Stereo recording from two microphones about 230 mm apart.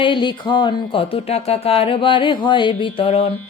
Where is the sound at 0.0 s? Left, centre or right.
Left.